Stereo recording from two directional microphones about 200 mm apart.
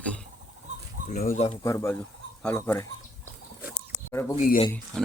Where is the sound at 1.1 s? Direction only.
40° left (ahead or behind).